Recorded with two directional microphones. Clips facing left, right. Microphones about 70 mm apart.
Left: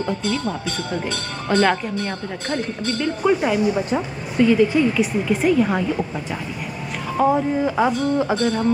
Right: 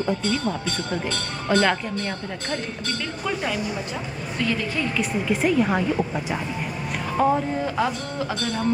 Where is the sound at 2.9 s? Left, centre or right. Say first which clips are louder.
Left 11 dB; centre.